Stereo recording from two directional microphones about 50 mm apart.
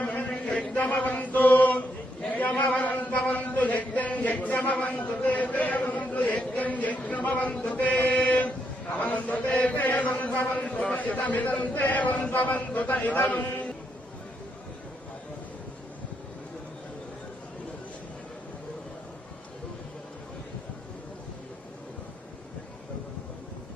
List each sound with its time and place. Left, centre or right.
0.0 s chant: left
2.2 s a man's voice: left
9.0 s chant: left
9.7 s a man's voice: left